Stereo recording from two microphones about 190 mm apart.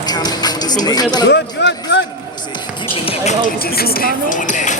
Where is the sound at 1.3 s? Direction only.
65° left (ahead or behind).